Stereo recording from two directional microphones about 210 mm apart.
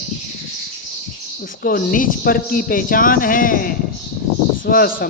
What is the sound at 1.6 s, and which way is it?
A man's voice, 45° left (ahead or behind).